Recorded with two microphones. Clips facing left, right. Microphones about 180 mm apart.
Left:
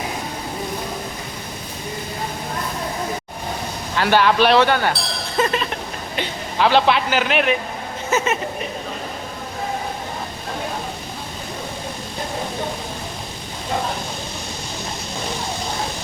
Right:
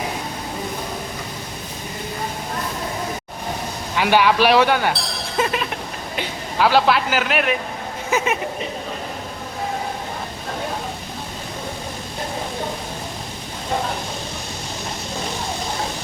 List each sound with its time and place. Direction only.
3.9 s speech: 10° right (ahead or behind)
5.4 s a sound: 10° right (ahead or behind)
6.1 s a man's voice: 5° right (ahead or behind)